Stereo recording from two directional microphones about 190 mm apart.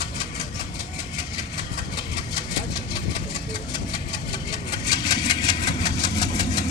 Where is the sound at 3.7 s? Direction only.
20° left (ahead or behind).